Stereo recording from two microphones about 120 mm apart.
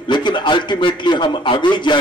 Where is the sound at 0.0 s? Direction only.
40° left (ahead or behind).